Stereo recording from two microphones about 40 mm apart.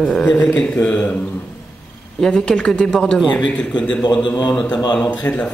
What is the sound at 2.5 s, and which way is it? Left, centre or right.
Speech, centre.